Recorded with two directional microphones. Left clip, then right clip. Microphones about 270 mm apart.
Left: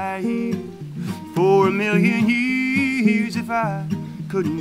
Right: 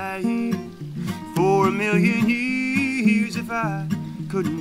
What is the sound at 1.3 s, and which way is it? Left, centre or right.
Music, centre.